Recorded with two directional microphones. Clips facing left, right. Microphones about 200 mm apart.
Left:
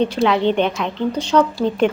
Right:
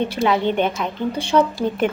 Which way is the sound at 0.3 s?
5° right (ahead or behind).